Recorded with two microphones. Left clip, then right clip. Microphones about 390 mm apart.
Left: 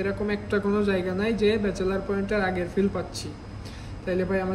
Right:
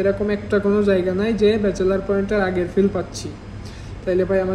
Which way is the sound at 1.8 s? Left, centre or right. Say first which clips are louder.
Right 8 dB; right.